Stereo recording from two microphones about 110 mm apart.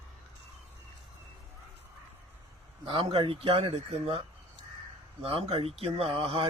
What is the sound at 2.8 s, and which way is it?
A man's voice, 50° right (ahead or behind).